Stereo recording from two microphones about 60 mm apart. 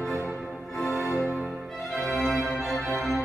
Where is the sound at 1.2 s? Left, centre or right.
Right.